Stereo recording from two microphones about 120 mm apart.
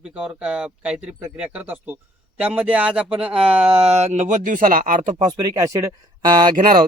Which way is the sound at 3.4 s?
55° right (ahead or behind).